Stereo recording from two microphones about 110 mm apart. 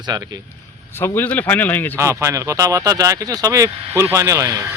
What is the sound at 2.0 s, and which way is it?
Speech, 25° right (ahead or behind).